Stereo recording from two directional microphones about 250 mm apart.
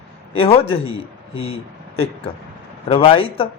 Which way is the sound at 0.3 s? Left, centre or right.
Left.